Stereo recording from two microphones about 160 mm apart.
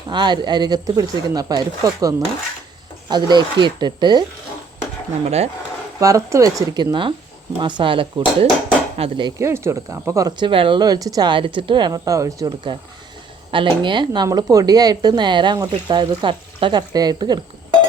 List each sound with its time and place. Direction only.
0.1 s speech: 30° right (ahead or behind)
6.0 s speech: 20° right (ahead or behind)
9.4 s speech: 20° right (ahead or behind)